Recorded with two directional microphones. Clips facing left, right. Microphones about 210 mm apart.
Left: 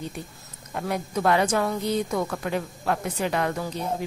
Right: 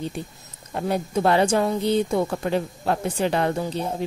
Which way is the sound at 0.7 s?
30° right (ahead or behind).